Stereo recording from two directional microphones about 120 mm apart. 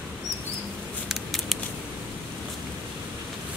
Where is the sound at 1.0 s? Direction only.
Centre (ahead or behind).